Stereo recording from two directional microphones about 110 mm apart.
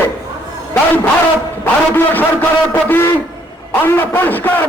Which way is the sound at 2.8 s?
20° left (ahead or behind).